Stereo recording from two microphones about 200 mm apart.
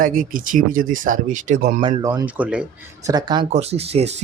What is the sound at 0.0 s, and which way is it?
Speech, 45° right (ahead or behind).